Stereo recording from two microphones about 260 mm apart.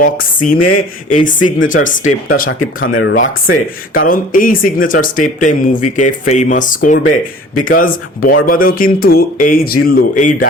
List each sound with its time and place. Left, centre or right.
0.0 s speech: left